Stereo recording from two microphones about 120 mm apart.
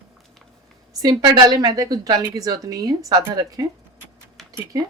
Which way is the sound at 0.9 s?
35° right (ahead or behind).